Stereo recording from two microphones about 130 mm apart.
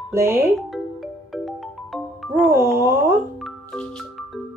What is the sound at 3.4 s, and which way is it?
Music, centre (ahead or behind).